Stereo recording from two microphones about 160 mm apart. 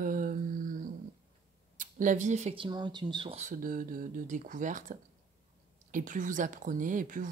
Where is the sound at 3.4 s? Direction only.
60° right (ahead or behind).